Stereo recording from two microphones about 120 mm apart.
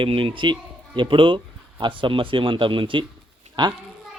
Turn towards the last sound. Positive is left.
turn(degrees=-40)  # may be behind; listen again after turning